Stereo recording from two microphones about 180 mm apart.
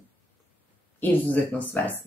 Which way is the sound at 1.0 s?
10° left (ahead or behind).